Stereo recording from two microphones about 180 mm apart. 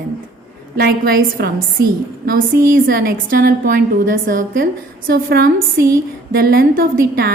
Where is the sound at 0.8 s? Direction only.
55° right (ahead or behind).